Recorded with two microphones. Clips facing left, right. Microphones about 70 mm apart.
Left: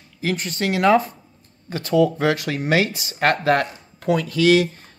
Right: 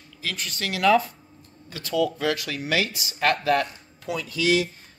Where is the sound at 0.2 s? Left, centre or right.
Left.